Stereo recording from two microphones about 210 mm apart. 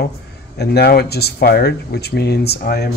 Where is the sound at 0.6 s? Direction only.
50° left (ahead or behind).